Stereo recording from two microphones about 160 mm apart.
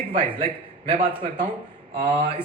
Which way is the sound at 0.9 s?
45° right (ahead or behind).